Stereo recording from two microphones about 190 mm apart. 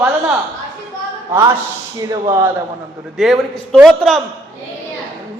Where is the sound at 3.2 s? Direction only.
Centre (ahead or behind).